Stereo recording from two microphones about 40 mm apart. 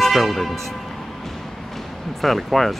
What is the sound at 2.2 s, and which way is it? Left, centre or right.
Speech, centre.